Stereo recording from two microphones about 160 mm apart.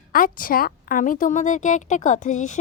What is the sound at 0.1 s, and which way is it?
A woman's voice, 60° left (ahead or behind).